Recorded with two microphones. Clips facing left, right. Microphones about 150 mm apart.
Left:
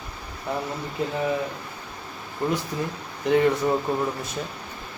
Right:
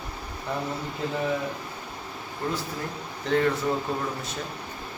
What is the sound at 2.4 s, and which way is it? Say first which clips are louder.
Speech: left 5 dB; 20° left (ahead or behind).